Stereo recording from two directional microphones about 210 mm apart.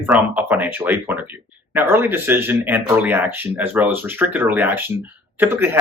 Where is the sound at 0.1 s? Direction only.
10° right (ahead or behind).